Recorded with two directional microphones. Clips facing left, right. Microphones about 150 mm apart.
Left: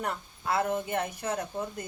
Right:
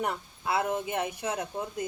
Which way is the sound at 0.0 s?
10° right (ahead or behind).